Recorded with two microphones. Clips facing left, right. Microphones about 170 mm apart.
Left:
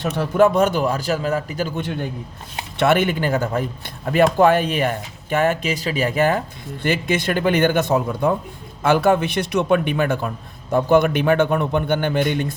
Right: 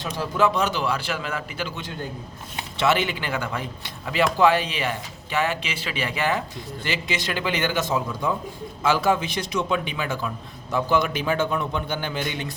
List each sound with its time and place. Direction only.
0.0 s a man's voice: 60° left (ahead or behind)